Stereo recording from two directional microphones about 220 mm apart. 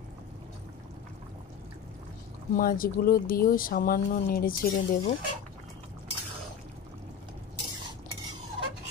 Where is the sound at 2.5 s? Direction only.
40° left (ahead or behind).